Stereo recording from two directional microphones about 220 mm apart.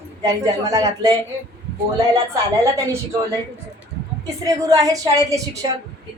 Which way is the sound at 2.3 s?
15° right (ahead or behind).